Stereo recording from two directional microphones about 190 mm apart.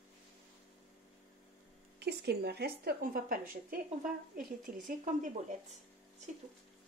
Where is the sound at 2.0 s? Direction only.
60° right (ahead or behind); by 5.6 s 40° right (ahead or behind).